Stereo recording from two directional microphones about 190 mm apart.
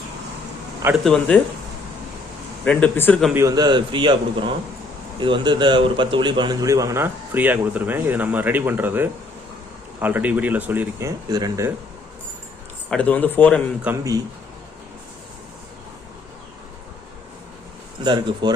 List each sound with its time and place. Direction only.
1.0 s speech: 5° left (ahead or behind)
2.6 s a man's voice: 10° left (ahead or behind)
3.3 s a man's voice: 20° right (ahead or behind)
11.3 s a man's voice: 20° right (ahead or behind)
12.9 s a man's voice: 5° left (ahead or behind)
13.8 s a man's voice: 15° right (ahead or behind)
18.0 s a man's voice: 25° right (ahead or behind)